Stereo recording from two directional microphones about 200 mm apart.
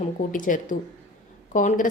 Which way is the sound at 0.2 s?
40° left (ahead or behind).